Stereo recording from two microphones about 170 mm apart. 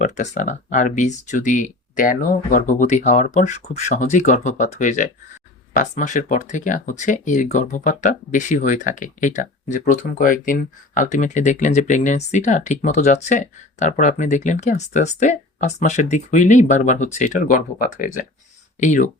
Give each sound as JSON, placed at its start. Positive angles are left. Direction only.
{"t": 0.0, "sound": "speech", "side_deg": 45}